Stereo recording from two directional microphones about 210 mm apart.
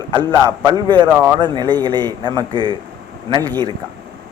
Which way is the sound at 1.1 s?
5° right (ahead or behind).